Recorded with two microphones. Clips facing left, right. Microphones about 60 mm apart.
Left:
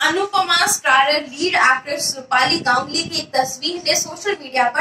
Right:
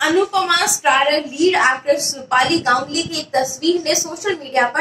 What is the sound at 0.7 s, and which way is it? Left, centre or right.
A woman's voice, left.